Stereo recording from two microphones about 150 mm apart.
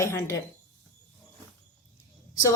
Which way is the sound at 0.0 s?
20° left (ahead or behind).